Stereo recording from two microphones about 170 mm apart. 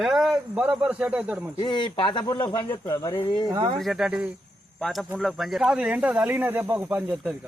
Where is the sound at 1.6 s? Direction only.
25° left (ahead or behind).